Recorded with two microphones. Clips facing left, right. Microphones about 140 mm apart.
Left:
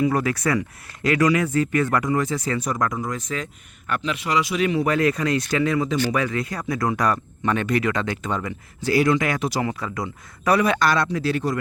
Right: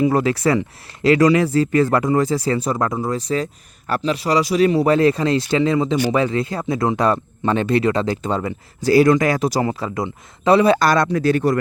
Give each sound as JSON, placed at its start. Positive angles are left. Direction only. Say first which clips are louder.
{"t": 0.0, "sound": "speech", "louder": "right 4 dB", "side_deg": -25}